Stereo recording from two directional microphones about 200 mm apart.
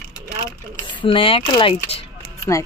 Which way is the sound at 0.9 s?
25° left (ahead or behind).